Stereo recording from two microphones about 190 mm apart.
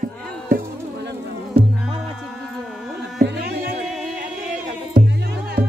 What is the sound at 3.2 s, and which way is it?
Music, 60° right (ahead or behind).